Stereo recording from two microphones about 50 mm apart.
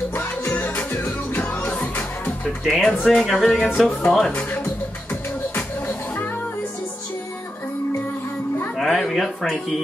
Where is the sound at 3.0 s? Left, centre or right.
Centre.